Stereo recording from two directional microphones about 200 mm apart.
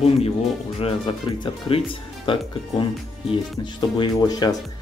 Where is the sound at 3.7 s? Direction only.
20° left (ahead or behind).